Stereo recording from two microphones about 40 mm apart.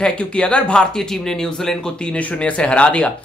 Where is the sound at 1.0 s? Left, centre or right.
Centre.